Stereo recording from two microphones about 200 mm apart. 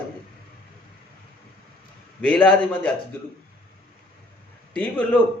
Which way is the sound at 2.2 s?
5° left (ahead or behind).